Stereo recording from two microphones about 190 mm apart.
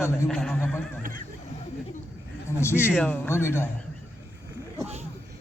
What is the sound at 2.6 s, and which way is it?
A man's voice, 10° left (ahead or behind).